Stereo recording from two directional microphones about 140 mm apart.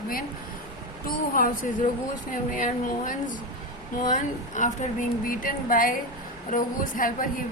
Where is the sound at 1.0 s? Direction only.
90° left.